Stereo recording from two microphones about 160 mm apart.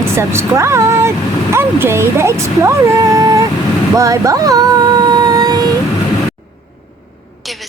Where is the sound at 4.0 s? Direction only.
20° right (ahead or behind).